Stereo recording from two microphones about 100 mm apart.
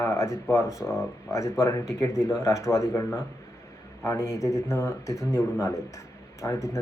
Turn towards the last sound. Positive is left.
turn(degrees=30)  # may be behind; listen again after turning